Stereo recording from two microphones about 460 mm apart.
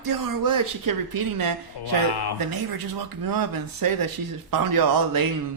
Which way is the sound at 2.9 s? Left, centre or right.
Right.